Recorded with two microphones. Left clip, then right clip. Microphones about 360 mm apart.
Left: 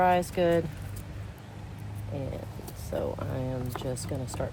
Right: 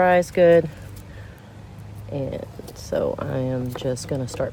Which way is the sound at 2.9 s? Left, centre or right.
Right.